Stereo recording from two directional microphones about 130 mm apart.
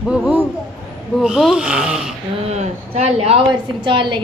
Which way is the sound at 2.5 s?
55° right (ahead or behind).